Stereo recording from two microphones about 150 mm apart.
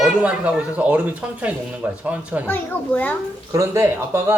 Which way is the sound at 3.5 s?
15° right (ahead or behind).